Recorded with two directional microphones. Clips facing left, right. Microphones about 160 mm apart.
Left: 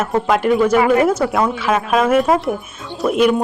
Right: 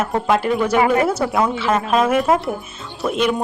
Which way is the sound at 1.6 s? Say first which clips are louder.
Left 1 dB; 10° left (ahead or behind).